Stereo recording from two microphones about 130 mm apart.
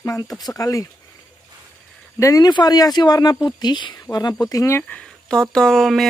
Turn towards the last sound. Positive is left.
turn(degrees=0)  # may be behind; listen again after turning